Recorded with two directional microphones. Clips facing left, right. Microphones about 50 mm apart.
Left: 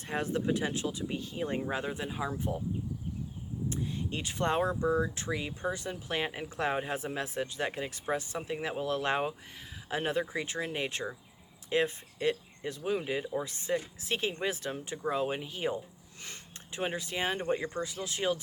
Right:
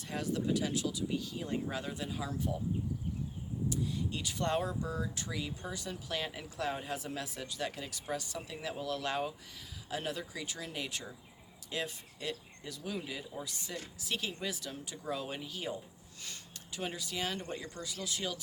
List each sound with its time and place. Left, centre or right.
0.1 s speech: left
3.7 s speech: left